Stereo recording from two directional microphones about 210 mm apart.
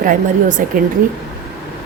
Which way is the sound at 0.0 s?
40° right (ahead or behind).